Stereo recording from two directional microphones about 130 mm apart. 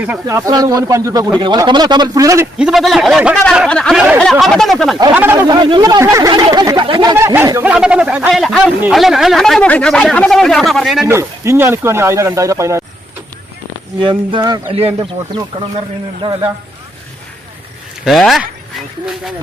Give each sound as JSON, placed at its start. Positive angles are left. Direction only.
{"t": 0.3, "sound": "speech", "side_deg": -25}
{"t": 1.4, "sound": "a man's voice", "side_deg": -35}
{"t": 2.6, "sound": "speech", "side_deg": -5}
{"t": 3.7, "sound": "speech", "side_deg": 5}
{"t": 3.9, "sound": "speech", "side_deg": -5}
{"t": 5.1, "sound": "speech", "side_deg": -15}
{"t": 5.5, "sound": "a man's voice", "side_deg": -35}
{"t": 6.0, "sound": "speech", "side_deg": -25}
{"t": 7.6, "sound": "speech", "side_deg": -10}
{"t": 11.0, "sound": "speech", "side_deg": -20}
{"t": 14.0, "sound": "a man's voice", "side_deg": -40}
{"t": 14.7, "sound": "speech", "side_deg": -45}
{"t": 18.0, "sound": "speech", "side_deg": 0}